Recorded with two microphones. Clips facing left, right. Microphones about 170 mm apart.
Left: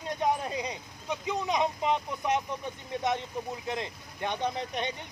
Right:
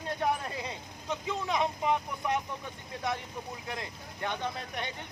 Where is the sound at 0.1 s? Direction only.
20° left (ahead or behind).